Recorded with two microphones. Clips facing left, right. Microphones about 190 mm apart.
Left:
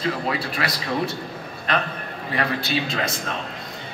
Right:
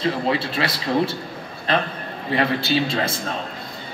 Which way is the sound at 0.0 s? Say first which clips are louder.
Right 3 dB; 25° right (ahead or behind).